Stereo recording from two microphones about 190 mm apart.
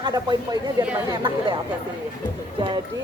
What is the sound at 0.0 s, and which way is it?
Speech, 20° right (ahead or behind).